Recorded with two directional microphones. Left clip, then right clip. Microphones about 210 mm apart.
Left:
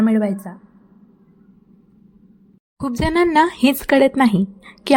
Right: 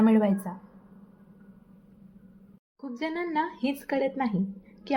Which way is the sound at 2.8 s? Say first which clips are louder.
Left 14 dB; 55° left (ahead or behind).